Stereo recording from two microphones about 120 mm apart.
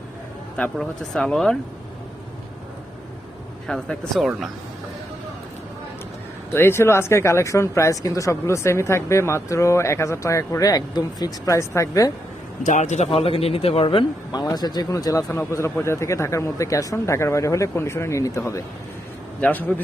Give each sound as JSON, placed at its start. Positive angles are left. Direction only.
{"t": 0.5, "sound": "speech", "side_deg": 5}
{"t": 3.7, "sound": "speech", "side_deg": 5}
{"t": 6.5, "sound": "speech", "side_deg": 20}
{"t": 12.6, "sound": "a man's voice", "side_deg": 85}
{"t": 13.1, "sound": "speech", "side_deg": 55}
{"t": 14.3, "sound": "speech", "side_deg": 35}
{"t": 19.4, "sound": "a man's voice", "side_deg": 15}